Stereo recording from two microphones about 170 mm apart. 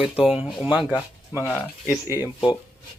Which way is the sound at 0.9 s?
15° left (ahead or behind).